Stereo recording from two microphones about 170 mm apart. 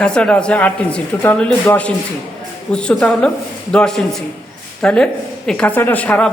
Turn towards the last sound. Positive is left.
turn(degrees=5)  # may be behind; listen again after turning